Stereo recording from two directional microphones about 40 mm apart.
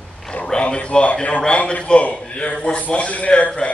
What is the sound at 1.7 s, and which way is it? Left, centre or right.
A man's voice, left.